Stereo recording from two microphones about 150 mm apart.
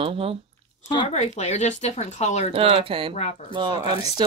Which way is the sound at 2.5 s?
40° right (ahead or behind).